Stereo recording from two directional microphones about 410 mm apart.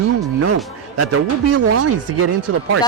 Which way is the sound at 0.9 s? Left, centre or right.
Right.